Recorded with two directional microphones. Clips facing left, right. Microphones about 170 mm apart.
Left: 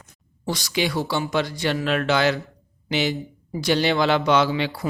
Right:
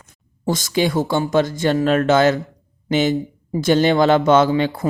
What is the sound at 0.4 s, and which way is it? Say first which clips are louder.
Speech: right 6 dB; 45° right (ahead or behind).